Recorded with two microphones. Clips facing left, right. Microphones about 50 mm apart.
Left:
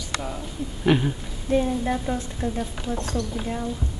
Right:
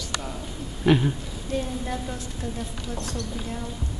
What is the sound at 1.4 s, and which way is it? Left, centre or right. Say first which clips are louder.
A woman's voice: left 7 dB; left.